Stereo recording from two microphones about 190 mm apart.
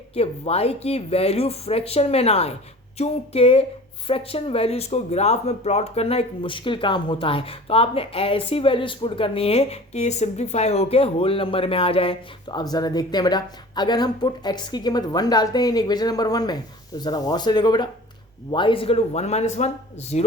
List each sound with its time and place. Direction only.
0.1 s speech: 30° left (ahead or behind)